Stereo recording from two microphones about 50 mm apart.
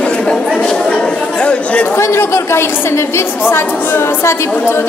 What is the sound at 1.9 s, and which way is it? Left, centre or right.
A woman's voice, left.